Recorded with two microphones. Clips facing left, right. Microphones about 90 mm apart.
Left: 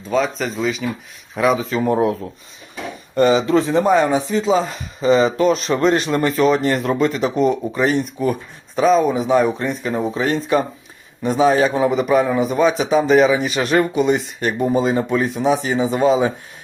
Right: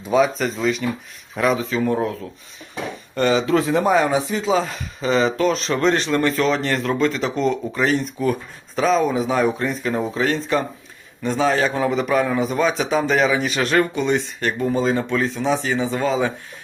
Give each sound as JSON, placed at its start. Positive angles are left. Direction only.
{"t": 0.1, "sound": "speech", "side_deg": -5}
{"t": 3.2, "sound": "a man's voice", "side_deg": 0}